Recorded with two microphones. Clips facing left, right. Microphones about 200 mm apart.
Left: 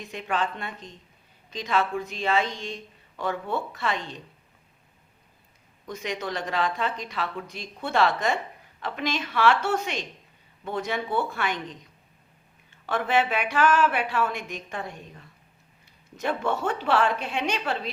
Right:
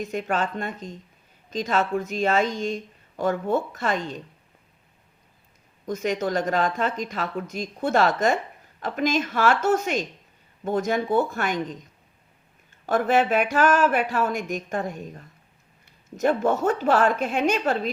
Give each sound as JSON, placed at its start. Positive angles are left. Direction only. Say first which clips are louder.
{"t": 0.0, "sound": "speech", "louder": "right 3 dB", "side_deg": -45}
{"t": 5.8, "sound": "speech", "louder": "right 7 dB", "side_deg": -45}
{"t": 12.8, "sound": "speech", "louder": "right 4 dB", "side_deg": -45}